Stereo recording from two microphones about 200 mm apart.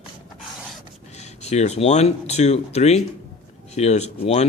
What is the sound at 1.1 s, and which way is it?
Speech, 35° left (ahead or behind).